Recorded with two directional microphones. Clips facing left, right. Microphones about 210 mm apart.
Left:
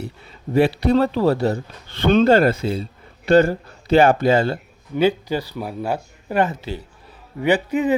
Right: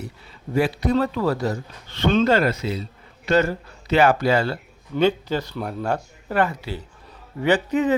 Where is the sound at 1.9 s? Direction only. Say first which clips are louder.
Left 3 dB; 55° left (ahead or behind).